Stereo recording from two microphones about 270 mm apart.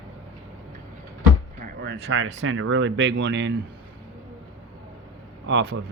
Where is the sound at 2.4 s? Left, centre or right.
Right.